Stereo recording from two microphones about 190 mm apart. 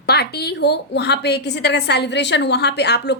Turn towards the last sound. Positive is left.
turn(degrees=60)  # may be behind; listen again after turning